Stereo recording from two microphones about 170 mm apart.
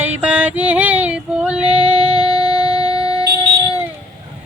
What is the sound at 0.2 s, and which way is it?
Female singing, 10° right (ahead or behind).